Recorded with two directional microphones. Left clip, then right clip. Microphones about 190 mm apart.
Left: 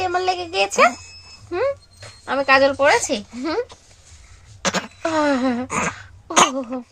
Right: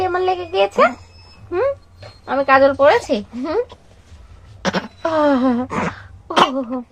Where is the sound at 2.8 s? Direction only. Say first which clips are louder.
Right 3 dB; centre (ahead or behind).